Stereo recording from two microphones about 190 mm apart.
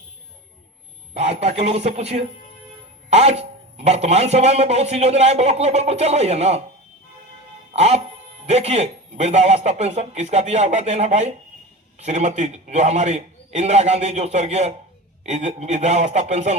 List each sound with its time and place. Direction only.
1.1 s speech: 35° right (ahead or behind)
7.7 s speech: 35° right (ahead or behind)